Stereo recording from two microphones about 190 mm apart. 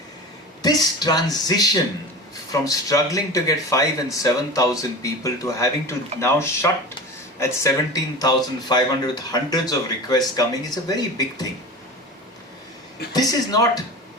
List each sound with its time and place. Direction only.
0.6 s speech: 20° left (ahead or behind)
13.1 s speech: 20° left (ahead or behind)